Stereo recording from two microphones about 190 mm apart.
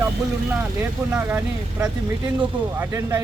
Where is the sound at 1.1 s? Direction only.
10° right (ahead or behind).